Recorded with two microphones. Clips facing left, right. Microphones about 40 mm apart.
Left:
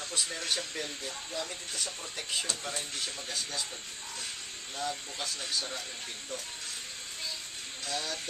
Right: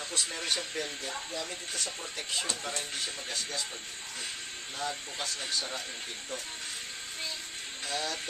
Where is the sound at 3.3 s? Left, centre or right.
Centre.